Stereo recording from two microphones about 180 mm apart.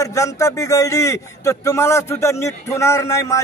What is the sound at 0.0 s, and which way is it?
A man's voice, 15° left (ahead or behind).